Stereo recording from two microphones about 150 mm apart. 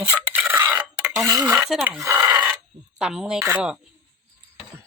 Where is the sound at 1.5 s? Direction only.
10° right (ahead or behind).